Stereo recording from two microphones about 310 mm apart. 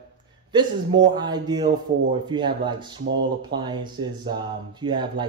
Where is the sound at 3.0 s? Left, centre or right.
Right.